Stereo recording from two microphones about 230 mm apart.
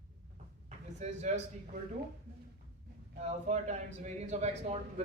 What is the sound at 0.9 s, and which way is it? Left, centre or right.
Speech, right.